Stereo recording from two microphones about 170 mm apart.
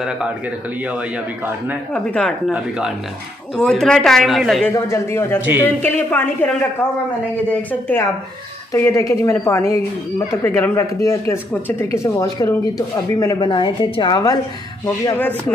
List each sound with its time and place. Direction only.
0.8 s a man's voice: 10° right (ahead or behind)
2.0 s speech: 5° left (ahead or behind)
3.5 s speech: 5° left (ahead or behind)
4.7 s speech: 15° left (ahead or behind)
8.7 s speech: 15° left (ahead or behind)